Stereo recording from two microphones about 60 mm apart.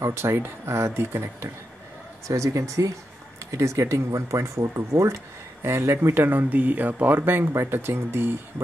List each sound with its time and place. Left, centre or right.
0.0 s speech: right
2.2 s speech: right
7.2 s speech: right